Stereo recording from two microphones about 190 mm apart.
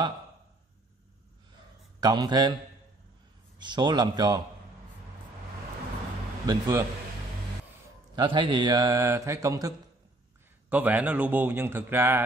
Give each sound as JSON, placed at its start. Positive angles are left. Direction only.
{"t": 2.0, "sound": "a man's voice", "side_deg": -20}
{"t": 3.5, "sound": "speech", "side_deg": -25}
{"t": 6.4, "sound": "speech", "side_deg": -15}
{"t": 8.2, "sound": "speech", "side_deg": -25}